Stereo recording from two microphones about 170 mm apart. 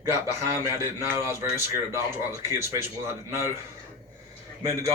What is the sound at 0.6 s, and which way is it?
Speech, 15° right (ahead or behind).